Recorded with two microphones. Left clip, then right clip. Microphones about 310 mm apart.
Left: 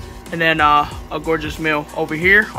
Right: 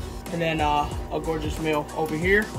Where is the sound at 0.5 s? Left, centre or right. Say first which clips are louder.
Left 10 dB; left.